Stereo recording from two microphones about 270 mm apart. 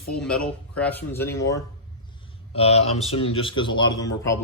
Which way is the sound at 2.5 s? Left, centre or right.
Left.